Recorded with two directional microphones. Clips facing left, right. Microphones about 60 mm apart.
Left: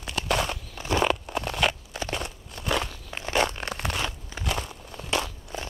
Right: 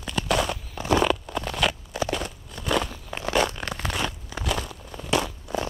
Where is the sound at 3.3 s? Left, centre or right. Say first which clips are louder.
Right 1 dB; left.